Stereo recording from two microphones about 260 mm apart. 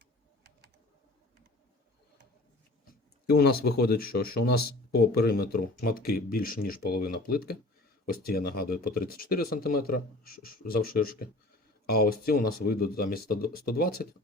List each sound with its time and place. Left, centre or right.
3.2 s speech: left